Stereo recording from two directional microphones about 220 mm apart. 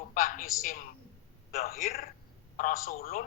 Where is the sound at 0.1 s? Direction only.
40° left (ahead or behind).